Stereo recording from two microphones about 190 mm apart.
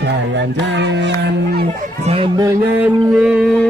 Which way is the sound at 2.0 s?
30° right (ahead or behind).